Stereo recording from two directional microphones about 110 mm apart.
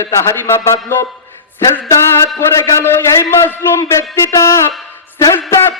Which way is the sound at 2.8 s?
20° left (ahead or behind).